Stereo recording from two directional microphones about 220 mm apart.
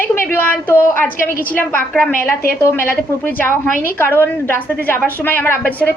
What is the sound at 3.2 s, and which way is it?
A woman's voice, 5° left (ahead or behind).